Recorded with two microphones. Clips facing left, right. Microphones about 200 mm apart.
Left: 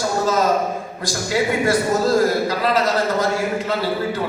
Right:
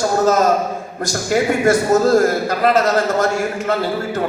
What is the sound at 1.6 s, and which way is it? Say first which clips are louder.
A man's voice: right 4 dB; 45° right (ahead or behind).